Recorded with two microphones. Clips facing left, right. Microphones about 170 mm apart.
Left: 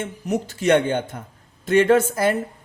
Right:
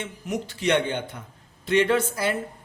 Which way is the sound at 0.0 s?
45° left (ahead or behind).